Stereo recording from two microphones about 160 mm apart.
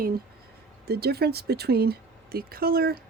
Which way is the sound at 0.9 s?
85° right.